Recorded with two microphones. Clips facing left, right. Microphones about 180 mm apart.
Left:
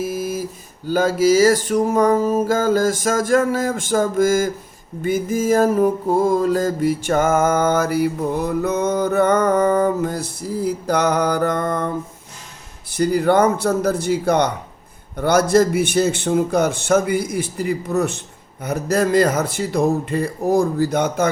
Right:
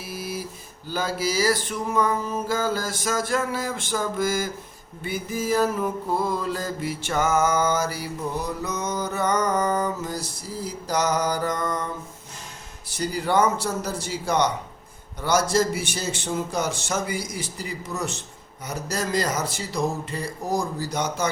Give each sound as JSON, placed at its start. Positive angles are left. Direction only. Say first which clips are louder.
{"t": 0.0, "sound": "mantra", "louder": "left 9 dB", "side_deg": 45}
{"t": 0.9, "sound": "music", "louder": "left 11 dB", "side_deg": 45}
{"t": 5.0, "sound": "mantra", "louder": "left 8 dB", "side_deg": 45}
{"t": 12.9, "sound": "mantra", "louder": "left 8 dB", "side_deg": 55}